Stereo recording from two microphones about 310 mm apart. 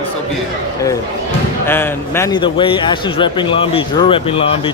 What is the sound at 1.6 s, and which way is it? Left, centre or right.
A man's voice, centre.